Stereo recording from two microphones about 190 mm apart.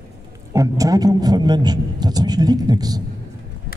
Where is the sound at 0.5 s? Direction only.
15° right (ahead or behind).